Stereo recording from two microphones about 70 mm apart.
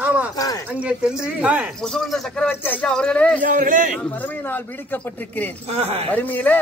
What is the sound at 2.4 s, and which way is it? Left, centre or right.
Speech, left.